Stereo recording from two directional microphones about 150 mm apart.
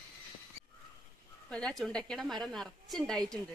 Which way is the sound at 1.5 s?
5° left (ahead or behind).